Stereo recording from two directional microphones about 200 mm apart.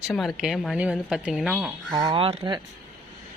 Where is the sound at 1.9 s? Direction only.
20° right (ahead or behind).